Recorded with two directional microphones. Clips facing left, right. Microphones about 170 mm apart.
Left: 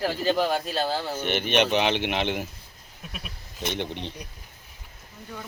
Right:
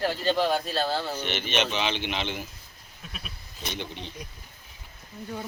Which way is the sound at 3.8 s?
70° left (ahead or behind).